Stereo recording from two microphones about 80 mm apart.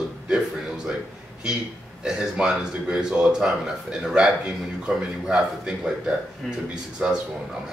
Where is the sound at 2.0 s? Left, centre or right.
Centre.